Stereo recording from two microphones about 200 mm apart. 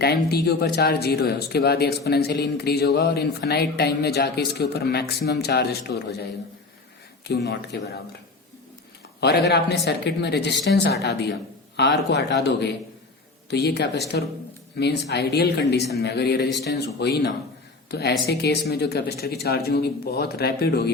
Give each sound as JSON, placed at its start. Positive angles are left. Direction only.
{"t": 0.0, "sound": "speech", "side_deg": 50}
{"t": 7.3, "sound": "speech", "side_deg": 55}
{"t": 9.2, "sound": "speech", "side_deg": 55}